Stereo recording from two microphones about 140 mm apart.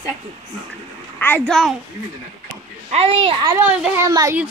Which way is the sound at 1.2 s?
15° left (ahead or behind).